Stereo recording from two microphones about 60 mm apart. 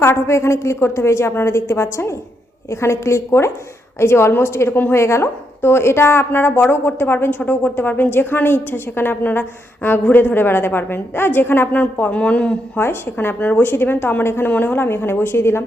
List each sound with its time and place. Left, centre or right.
0.0 s a woman's voice: left
12.1 s speech: centre
12.7 s a woman's voice: left